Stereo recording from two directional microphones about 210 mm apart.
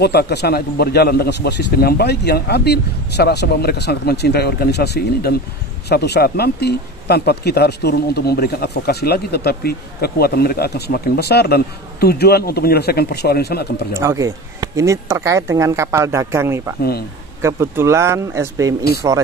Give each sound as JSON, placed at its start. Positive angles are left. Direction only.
{"t": 0.0, "sound": "speech", "side_deg": 50}
{"t": 13.9, "sound": "speech", "side_deg": -15}